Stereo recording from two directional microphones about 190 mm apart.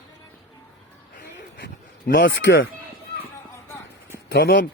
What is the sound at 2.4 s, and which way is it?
Speech, 75° left (ahead or behind).